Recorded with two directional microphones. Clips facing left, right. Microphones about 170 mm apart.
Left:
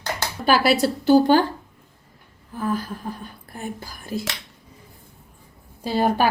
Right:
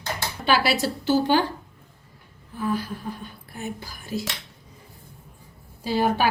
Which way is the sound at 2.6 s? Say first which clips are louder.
Left 1 dB; 45° left (ahead or behind).